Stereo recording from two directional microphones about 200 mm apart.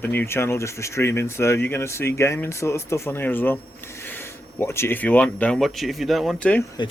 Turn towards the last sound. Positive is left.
turn(degrees=20)  # may be behind; listen again after turning